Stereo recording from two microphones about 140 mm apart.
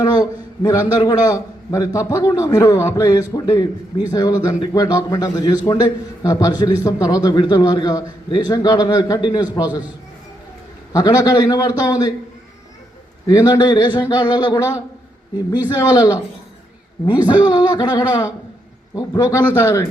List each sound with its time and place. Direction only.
0.0 s a man's voice: 25° left (ahead or behind)
10.9 s a man's voice: 25° left (ahead or behind)
13.2 s speech: 25° left (ahead or behind)
15.8 s a man's voice: 25° left (ahead or behind)
19.5 s a man's voice: 20° left (ahead or behind)